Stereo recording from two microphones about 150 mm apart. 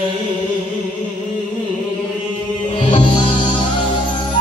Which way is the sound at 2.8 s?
35° left (ahead or behind).